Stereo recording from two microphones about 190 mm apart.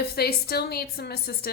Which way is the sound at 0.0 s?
55° left (ahead or behind).